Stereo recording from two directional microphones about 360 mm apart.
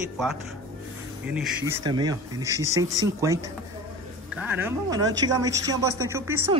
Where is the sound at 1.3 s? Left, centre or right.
Centre.